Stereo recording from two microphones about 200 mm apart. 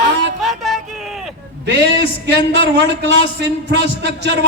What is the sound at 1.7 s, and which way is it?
A man's voice, 55° right (ahead or behind).